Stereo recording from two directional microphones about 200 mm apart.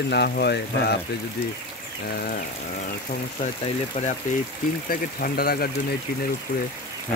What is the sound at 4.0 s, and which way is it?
Speech, 35° left (ahead or behind).